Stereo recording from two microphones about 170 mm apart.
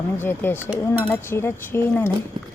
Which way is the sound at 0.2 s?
10° left (ahead or behind).